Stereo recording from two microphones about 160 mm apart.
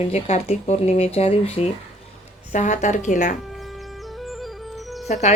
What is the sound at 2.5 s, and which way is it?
Speech, 50° left (ahead or behind).